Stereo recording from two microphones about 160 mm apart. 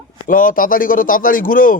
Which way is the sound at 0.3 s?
60° left (ahead or behind).